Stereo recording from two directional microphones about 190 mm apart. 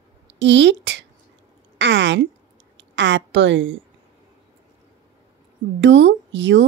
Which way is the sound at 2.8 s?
70° right (ahead or behind).